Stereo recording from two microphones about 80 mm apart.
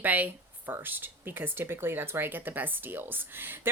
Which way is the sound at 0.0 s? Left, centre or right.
Right.